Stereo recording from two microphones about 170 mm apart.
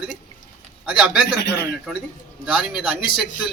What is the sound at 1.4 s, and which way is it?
Speech, 70° left (ahead or behind).